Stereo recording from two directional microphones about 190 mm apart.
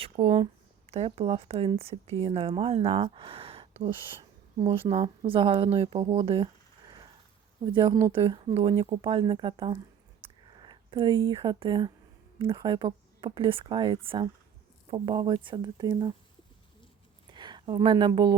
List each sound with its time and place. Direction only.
0.0 s speech: 30° right (ahead or behind)
10.2 s a sound: 25° right (ahead or behind)
12.4 s speech: 25° right (ahead or behind)
17.3 s a woman's voice: 25° right (ahead or behind)